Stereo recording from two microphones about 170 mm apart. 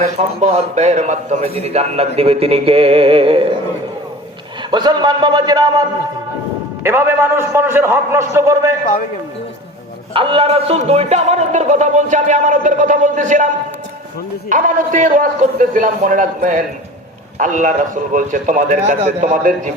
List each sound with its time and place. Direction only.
0.2 s a man's voice: 40° right (ahead or behind)
4.7 s a man's voice: 25° right (ahead or behind)
6.8 s a man's voice: 15° right (ahead or behind)
10.2 s speech: 30° right (ahead or behind); by 13.5 s 50° right (ahead or behind)
14.5 s speech: 50° right (ahead or behind)